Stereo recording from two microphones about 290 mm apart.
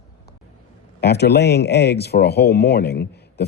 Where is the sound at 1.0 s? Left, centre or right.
Left.